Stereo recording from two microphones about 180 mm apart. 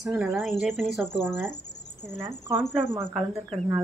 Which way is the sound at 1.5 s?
70° left (ahead or behind).